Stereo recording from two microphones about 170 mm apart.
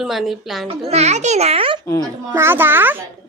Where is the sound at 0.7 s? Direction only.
40° right (ahead or behind).